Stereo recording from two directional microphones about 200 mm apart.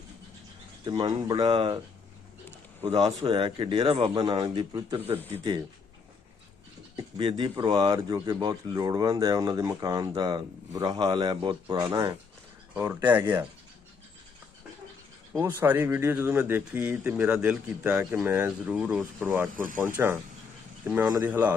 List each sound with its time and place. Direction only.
0.9 s speech: 20° right (ahead or behind)
2.8 s speech: 20° right (ahead or behind)
6.9 s speech: 25° right (ahead or behind); by 13.4 s 10° right (ahead or behind)
15.4 s speech: 10° right (ahead or behind)